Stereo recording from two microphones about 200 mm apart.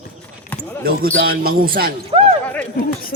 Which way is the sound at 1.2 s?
50° right (ahead or behind).